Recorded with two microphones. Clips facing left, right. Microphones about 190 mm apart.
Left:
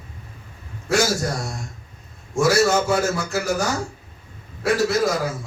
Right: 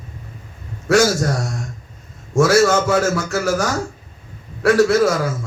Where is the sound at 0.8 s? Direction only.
70° right (ahead or behind).